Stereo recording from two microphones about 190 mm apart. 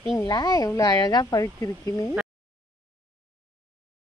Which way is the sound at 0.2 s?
20° left (ahead or behind).